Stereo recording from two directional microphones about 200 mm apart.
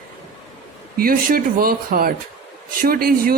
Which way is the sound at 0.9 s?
45° right (ahead or behind).